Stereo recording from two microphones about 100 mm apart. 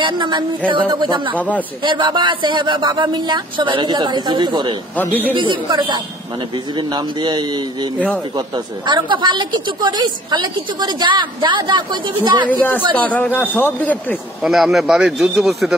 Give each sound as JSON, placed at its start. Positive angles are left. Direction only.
{"t": 0.0, "sound": "a woman's voice", "side_deg": -50}
{"t": 4.9, "sound": "a man's voice", "side_deg": 15}
{"t": 5.3, "sound": "a woman's voice", "side_deg": -55}
{"t": 12.4, "sound": "a man's voice", "side_deg": 20}
{"t": 14.4, "sound": "speech", "side_deg": 0}